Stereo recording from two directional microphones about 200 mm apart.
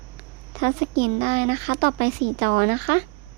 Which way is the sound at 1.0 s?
30° right (ahead or behind).